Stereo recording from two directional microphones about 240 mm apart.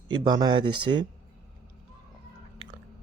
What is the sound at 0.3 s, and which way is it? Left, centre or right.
Speech, centre.